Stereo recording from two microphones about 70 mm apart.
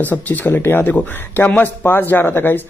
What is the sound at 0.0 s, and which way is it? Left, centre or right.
Speech, left.